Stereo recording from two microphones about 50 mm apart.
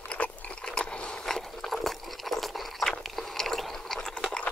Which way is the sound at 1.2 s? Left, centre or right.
Centre.